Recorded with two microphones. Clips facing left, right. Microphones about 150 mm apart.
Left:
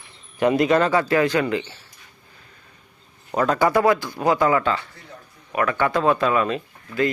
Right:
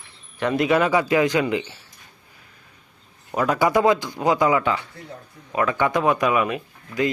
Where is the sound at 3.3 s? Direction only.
10° right (ahead or behind).